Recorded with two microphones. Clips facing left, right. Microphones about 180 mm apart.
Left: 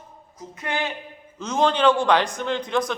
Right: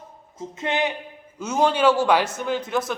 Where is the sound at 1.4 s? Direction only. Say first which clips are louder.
Right 1 dB; 10° right (ahead or behind).